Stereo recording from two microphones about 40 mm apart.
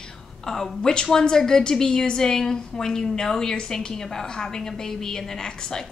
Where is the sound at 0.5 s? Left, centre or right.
Centre.